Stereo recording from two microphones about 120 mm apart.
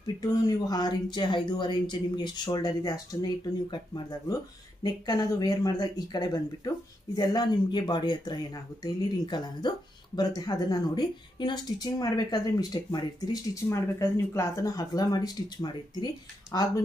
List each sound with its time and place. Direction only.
0.0 s speech: 30° left (ahead or behind)